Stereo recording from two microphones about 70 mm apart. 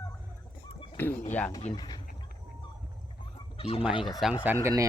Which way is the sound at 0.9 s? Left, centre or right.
Left.